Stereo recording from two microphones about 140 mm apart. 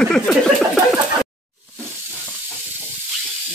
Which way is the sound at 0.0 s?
5° left (ahead or behind).